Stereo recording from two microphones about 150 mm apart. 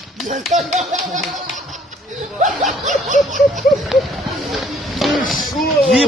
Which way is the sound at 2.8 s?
55° right (ahead or behind).